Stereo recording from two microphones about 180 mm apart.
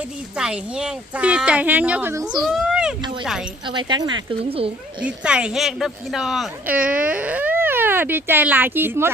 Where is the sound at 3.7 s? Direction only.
25° right (ahead or behind).